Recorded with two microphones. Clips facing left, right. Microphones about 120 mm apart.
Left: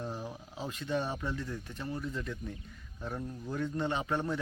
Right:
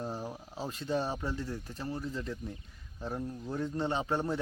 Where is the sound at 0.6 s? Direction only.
35° right (ahead or behind).